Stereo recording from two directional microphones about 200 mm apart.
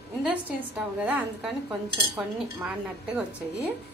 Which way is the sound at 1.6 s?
25° right (ahead or behind).